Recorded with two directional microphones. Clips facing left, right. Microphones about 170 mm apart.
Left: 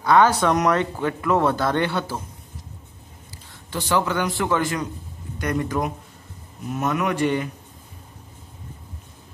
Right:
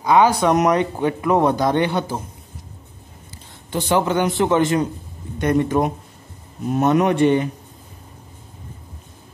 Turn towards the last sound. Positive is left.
turn(degrees=-25)  # may be behind; listen again after turning